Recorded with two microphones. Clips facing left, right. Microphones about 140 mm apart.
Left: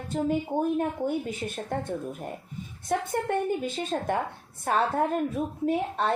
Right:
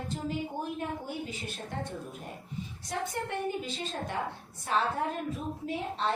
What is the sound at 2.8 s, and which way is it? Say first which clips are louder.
A woman's voice: left 8 dB; 50° left (ahead or behind).